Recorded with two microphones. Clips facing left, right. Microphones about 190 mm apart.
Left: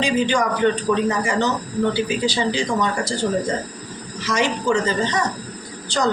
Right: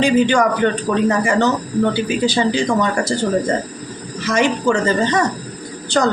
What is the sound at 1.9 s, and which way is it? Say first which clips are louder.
Speech: right 3 dB; 50° right (ahead or behind).